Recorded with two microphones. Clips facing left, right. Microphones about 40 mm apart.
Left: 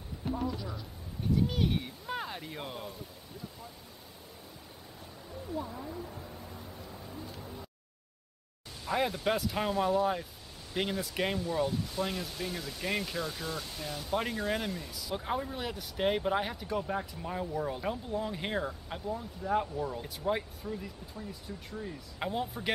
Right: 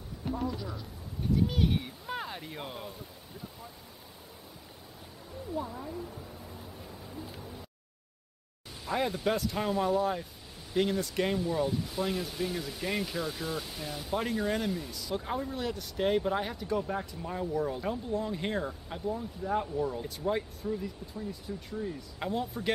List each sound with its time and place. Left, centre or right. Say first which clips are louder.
0.2 s speech: even; centre
5.5 s speech: right 2 dB; centre
5.9 s a sound: right 1 dB; centre
8.8 s speech: even; centre
22.2 s speech: right 1 dB; centre